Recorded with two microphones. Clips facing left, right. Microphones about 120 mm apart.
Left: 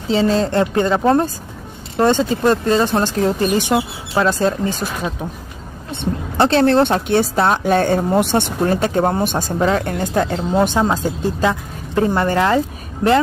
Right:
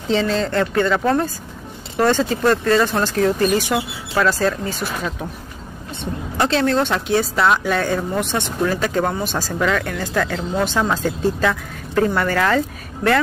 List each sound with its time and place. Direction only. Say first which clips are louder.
0.3 s speech: left 3 dB; 35° left (ahead or behind)
6.3 s a woman's voice: left 5 dB; 35° left (ahead or behind)
9.1 s speech: left 4 dB; 55° left (ahead or behind)
9.5 s speech: left 1 dB; 30° left (ahead or behind)
10.7 s a woman's voice: left 2 dB; 20° left (ahead or behind)